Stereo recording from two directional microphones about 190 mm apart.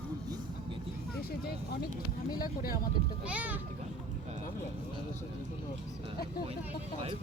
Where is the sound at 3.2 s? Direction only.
10° right (ahead or behind).